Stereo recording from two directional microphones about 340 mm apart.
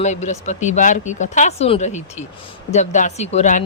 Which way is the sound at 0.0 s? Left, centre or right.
Centre.